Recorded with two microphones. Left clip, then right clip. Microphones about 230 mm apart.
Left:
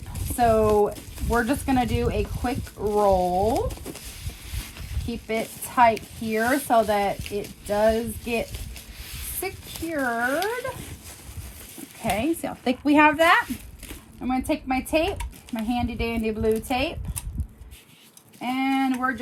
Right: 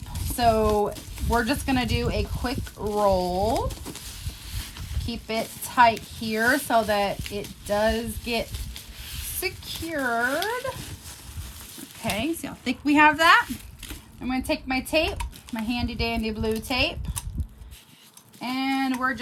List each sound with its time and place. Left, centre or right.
0.3 s speech: centre
5.0 s speech: centre
9.9 s speech: centre
12.0 s speech: centre
18.3 s speech: centre